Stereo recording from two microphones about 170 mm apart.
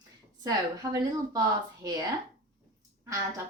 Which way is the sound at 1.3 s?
20° right (ahead or behind).